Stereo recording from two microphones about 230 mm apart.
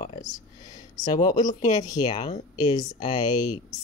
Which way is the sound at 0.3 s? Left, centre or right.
Centre.